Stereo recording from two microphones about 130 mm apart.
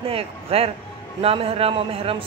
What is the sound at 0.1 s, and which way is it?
Speech, 50° right (ahead or behind).